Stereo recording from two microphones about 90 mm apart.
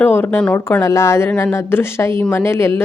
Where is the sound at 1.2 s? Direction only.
15° left (ahead or behind).